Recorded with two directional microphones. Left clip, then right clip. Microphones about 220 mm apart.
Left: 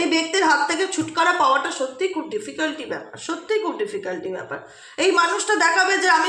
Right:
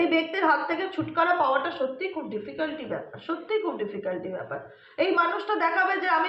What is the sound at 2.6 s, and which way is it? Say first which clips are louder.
A woman's voice: left 4 dB; 50° left (ahead or behind).